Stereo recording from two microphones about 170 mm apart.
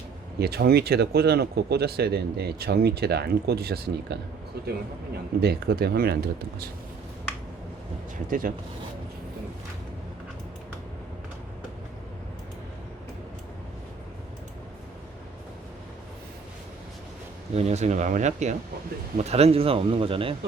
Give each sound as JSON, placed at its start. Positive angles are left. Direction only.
{"t": 0.3, "sound": "speech", "side_deg": -70}
{"t": 5.4, "sound": "speech", "side_deg": -70}
{"t": 8.3, "sound": "speech", "side_deg": -55}
{"t": 17.5, "sound": "speech", "side_deg": -40}